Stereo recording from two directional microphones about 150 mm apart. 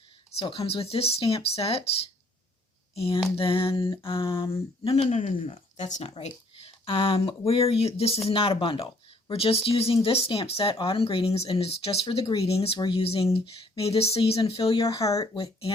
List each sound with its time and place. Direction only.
0.4 s speech: 40° left (ahead or behind)
3.3 s speech: 35° left (ahead or behind)
5.1 s speech: 55° left (ahead or behind); by 14.8 s 40° left (ahead or behind)
14.8 s speech: 20° left (ahead or behind)